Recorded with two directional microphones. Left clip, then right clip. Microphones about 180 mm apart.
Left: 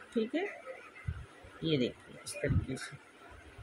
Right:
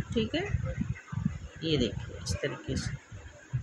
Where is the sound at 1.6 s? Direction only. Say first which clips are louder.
Right 3 dB; 15° right (ahead or behind).